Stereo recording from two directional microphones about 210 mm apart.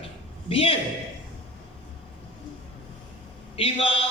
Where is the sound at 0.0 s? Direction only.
25° left (ahead or behind).